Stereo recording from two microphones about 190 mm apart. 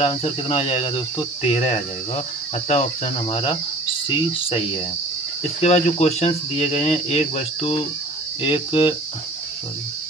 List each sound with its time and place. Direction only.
0.0 s speech: 30° left (ahead or behind)